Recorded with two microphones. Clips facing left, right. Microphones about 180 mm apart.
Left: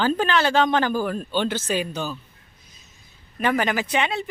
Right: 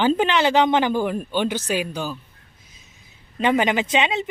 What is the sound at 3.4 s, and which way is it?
Speech, 20° right (ahead or behind).